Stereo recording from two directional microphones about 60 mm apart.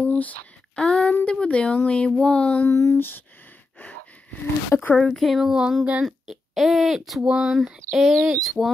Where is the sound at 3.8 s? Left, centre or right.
Left.